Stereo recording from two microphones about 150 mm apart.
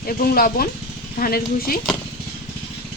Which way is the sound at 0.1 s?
80° left.